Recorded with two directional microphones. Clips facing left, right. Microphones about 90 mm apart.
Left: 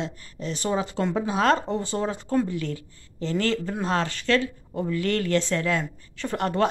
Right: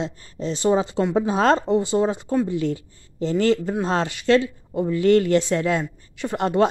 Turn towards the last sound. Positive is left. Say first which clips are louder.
# right 4 dB
turn(degrees=-20)  # may be behind; listen again after turning